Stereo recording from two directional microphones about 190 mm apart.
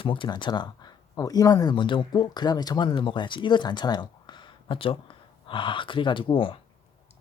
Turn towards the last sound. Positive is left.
turn(degrees=30)  # may be behind; listen again after turning